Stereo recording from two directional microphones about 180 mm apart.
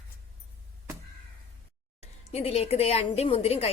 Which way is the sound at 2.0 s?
35° left (ahead or behind).